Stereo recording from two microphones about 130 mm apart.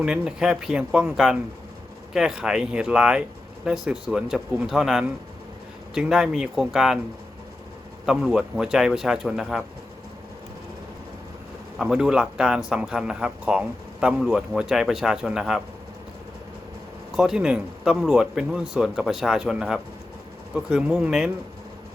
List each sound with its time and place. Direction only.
0.0 s a man's voice: 5° right (ahead or behind)
8.0 s a man's voice: 5° right (ahead or behind)
11.8 s a man's voice: 5° right (ahead or behind)
17.2 s a man's voice: 5° right (ahead or behind)